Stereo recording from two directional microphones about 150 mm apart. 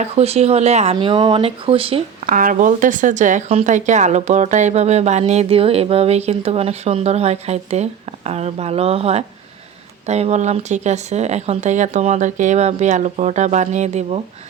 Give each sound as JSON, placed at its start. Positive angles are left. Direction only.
{"t": 0.0, "sound": "speech", "side_deg": -45}
{"t": 0.9, "sound": "speech", "side_deg": -35}
{"t": 2.2, "sound": "speech", "side_deg": -60}